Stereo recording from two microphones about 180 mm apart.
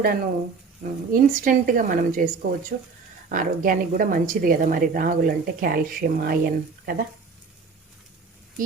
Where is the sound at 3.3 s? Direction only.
45° right (ahead or behind).